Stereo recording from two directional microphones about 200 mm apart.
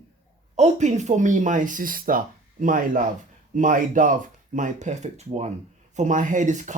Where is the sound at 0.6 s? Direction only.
35° right (ahead or behind).